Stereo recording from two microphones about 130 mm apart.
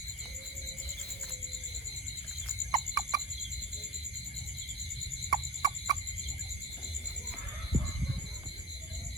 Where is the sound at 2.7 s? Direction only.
25° right (ahead or behind).